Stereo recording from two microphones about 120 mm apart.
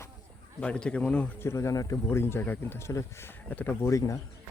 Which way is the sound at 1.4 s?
25° left (ahead or behind).